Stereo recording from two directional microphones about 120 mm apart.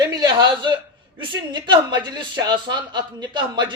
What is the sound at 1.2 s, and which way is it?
A man's voice, 40° right (ahead or behind).